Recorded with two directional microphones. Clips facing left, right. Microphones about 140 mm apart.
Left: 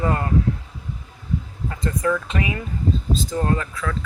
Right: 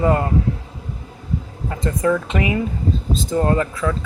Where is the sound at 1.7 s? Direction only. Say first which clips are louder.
Right 4 dB; 25° right (ahead or behind).